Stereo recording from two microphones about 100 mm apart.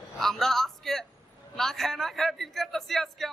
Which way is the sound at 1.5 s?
5° left (ahead or behind).